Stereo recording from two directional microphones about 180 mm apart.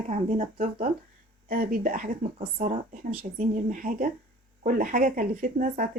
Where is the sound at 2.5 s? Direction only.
35° right (ahead or behind).